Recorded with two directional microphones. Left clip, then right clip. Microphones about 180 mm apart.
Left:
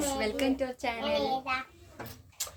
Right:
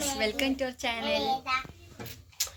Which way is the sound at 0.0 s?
Centre (ahead or behind).